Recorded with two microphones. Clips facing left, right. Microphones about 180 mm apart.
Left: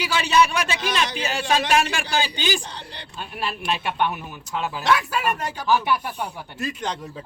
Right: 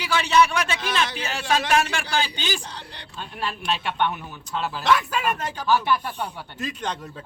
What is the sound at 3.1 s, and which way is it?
A man's voice, 10° left (ahead or behind).